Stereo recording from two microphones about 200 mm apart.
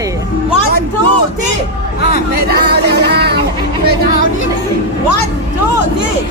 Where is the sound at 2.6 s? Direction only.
50° right (ahead or behind).